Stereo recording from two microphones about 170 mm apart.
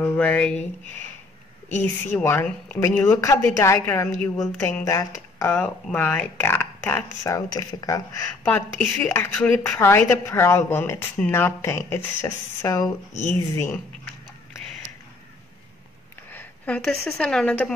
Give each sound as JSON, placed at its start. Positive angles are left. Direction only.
{"t": 0.0, "sound": "speech", "side_deg": 10}
{"t": 1.8, "sound": "speech", "side_deg": 10}
{"t": 16.3, "sound": "speech", "side_deg": 10}